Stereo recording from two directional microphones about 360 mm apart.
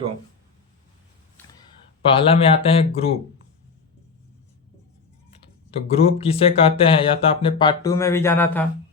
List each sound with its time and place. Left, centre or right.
2.0 s speech: centre
5.9 s speech: centre